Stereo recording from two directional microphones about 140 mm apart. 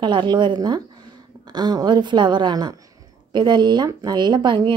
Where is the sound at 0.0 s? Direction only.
35° right (ahead or behind).